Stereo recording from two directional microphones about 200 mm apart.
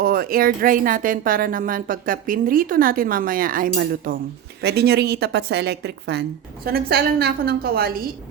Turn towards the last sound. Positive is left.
turn(degrees=-50)  # may be behind; listen again after turning